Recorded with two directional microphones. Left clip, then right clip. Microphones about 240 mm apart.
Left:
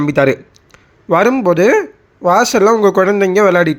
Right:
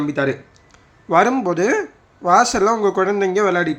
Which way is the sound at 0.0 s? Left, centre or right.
Left.